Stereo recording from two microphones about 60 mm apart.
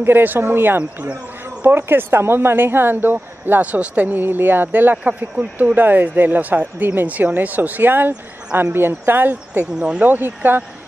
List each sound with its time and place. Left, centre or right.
0.0 s speech: right
4.9 s speech: right
9.8 s speech: centre
10.0 s speech: right